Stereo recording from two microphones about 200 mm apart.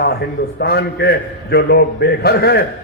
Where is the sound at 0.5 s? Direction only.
55° left (ahead or behind).